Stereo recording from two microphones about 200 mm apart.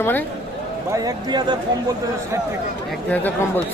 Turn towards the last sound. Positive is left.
turn(degrees=10)  # may be behind; listen again after turning